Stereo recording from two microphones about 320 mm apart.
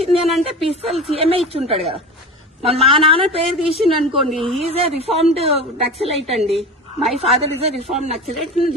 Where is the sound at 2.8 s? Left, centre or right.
Centre.